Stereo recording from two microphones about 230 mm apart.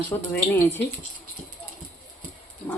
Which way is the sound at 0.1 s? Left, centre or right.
Centre.